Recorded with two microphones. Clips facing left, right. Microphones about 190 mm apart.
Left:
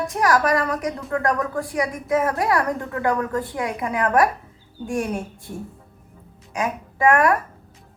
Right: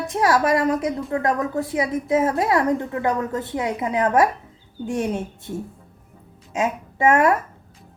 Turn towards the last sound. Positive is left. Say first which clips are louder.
# right 1 dB
turn(degrees=-25)  # may be behind; listen again after turning